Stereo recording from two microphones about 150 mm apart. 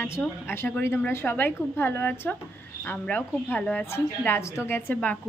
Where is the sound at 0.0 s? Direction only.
15° left (ahead or behind).